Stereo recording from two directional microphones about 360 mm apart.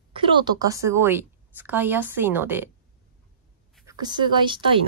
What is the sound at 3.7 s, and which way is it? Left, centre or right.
Speech, centre.